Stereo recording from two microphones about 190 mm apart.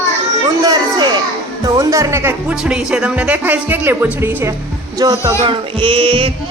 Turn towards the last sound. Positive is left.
turn(degrees=-25)  # may be behind; listen again after turning